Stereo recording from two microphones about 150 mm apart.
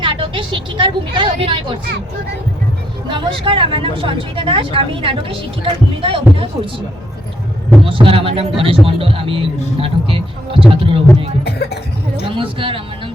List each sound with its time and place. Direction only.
0.0 s a woman's voice: 35° right (ahead or behind)
3.1 s speech: 35° right (ahead or behind)
7.9 s speech: 35° right (ahead or behind)
11.4 s speech: 90° left
12.4 s speech: 35° right (ahead or behind)